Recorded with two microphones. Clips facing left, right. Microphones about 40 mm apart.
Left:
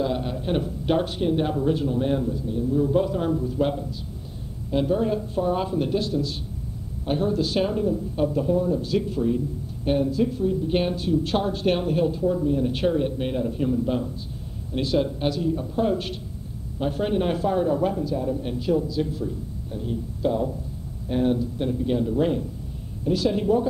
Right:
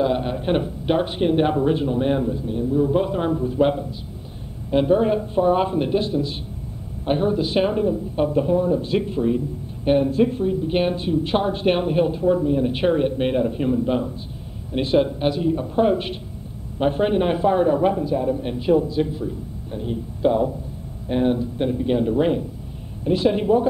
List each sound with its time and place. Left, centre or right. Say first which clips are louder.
0.0 s a sound: right 5 dB; right
0.7 s a man's voice: right 2 dB; centre
1.1 s a man's voice: right 5 dB; right
10.5 s a man's voice: right 3 dB; right